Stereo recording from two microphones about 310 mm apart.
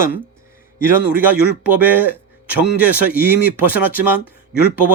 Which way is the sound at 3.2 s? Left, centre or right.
Left.